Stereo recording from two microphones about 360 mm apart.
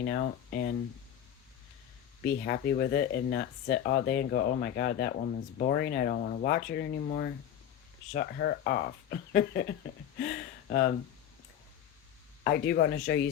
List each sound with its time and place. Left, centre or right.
0.0 s speech: left
2.4 s speech: left
12.5 s speech: left